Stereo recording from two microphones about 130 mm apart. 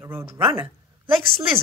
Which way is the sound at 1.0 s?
45° right (ahead or behind).